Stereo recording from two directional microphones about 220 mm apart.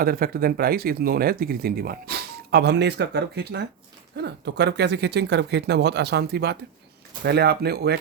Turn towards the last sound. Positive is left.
turn(degrees=-45)  # may be behind; listen again after turning